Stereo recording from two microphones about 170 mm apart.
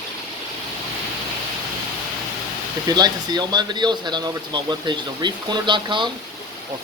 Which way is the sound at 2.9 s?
25° right (ahead or behind).